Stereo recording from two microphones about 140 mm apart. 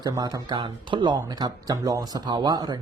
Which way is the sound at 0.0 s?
30° right (ahead or behind).